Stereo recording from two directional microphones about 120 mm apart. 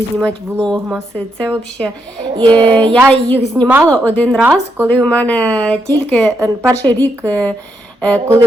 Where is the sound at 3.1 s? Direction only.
15° left (ahead or behind).